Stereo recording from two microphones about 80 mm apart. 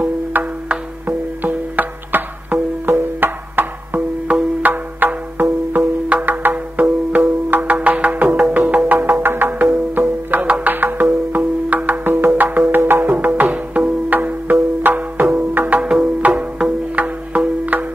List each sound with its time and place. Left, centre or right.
0.0 s music: right